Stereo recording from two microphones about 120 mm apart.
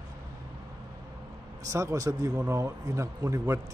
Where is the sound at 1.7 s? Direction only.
25° right (ahead or behind).